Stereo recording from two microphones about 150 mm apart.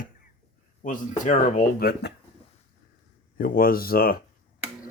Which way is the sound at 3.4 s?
75° left (ahead or behind).